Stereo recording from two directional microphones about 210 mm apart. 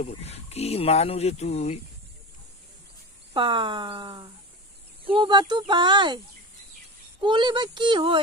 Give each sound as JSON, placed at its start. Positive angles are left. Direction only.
{"t": 0.0, "sound": "speech", "side_deg": 30}
{"t": 3.3, "sound": "speech", "side_deg": -25}